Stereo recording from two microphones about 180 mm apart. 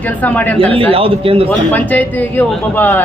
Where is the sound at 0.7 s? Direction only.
30° right (ahead or behind).